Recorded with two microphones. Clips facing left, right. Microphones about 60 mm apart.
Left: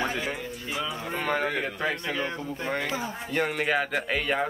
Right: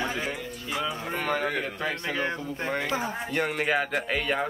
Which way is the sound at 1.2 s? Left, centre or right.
Centre.